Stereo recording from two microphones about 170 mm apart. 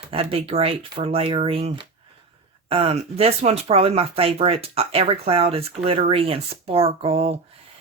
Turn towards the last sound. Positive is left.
turn(degrees=-35)  # may be behind; listen again after turning